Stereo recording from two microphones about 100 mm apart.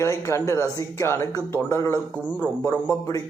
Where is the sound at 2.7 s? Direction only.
15° left (ahead or behind).